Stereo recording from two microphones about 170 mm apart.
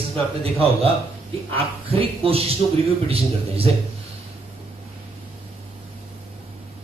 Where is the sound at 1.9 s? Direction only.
35° right (ahead or behind).